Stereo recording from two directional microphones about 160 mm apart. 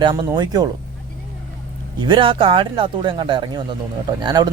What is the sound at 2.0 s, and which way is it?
A man's voice, 30° right (ahead or behind).